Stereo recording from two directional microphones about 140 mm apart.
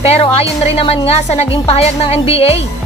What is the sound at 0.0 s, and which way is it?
A woman's voice, 45° left (ahead or behind).